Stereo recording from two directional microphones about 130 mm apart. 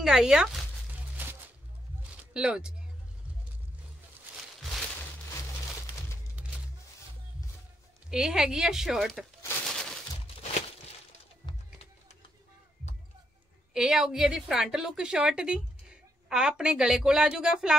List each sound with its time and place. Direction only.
0.0 s a woman's voice: 5° right (ahead or behind)
1.2 s music: 15° right (ahead or behind)
2.3 s speech: 5° right (ahead or behind)
4.6 s a sound: centre (ahead or behind)
8.1 s a woman's voice: 5° right (ahead or behind)
9.7 s a sound: 5° left (ahead or behind)
11.4 s music: 35° left (ahead or behind)
13.7 s a woman's voice: 5° right (ahead or behind)